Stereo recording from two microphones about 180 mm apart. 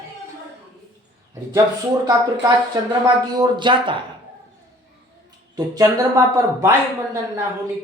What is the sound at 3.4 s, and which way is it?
Speech, 25° right (ahead or behind).